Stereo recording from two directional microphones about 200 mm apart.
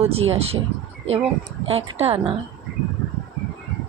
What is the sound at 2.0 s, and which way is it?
Speech, 30° right (ahead or behind).